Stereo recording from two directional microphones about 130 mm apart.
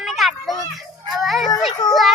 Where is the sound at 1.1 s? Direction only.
Centre (ahead or behind).